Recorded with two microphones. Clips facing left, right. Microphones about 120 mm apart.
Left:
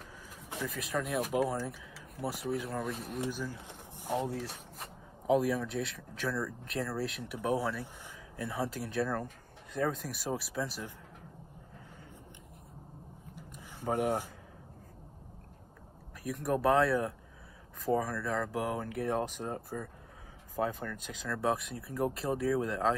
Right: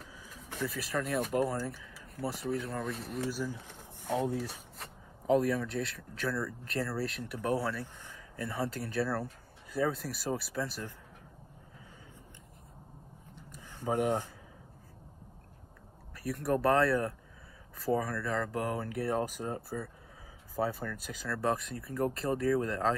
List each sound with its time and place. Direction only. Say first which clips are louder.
0.7 s speech: right 1 dB; centre (ahead or behind)
3.5 s pigeon: left 1 dB; 15° left (ahead or behind)
4.4 s speech: right 2 dB; centre (ahead or behind)
7.3 s speech: even; 15° left (ahead or behind)
8.4 s speech: even; centre (ahead or behind)
13.4 s a sound: even; 15° left (ahead or behind)
13.9 s speech: right 1 dB; 10° left (ahead or behind)
16.2 s speech: right 1 dB; centre (ahead or behind)